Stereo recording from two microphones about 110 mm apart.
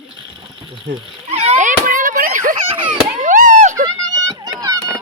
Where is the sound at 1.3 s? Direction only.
75° right (ahead or behind).